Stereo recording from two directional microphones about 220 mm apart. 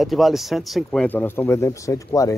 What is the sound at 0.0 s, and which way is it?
Speech, centre (ahead or behind).